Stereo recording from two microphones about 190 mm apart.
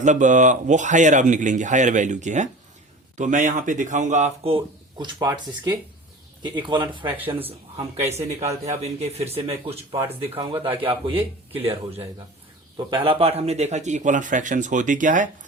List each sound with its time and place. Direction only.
0.0 s a man's voice: 40° right (ahead or behind); by 6.8 s 25° right (ahead or behind)
7.9 s speech: 15° right (ahead or behind)
8.6 s a man's voice: 35° right (ahead or behind)
12.7 s a man's voice: 25° right (ahead or behind); by 15.3 s 45° right (ahead or behind)